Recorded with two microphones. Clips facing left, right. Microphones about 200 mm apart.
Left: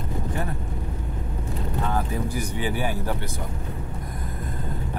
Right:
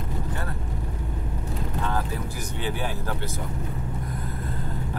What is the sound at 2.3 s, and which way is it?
Speech, 10° left (ahead or behind).